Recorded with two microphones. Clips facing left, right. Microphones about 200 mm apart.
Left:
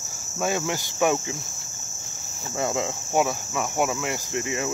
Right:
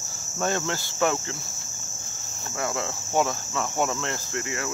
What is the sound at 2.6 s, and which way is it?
Cricket, 20° left (ahead or behind).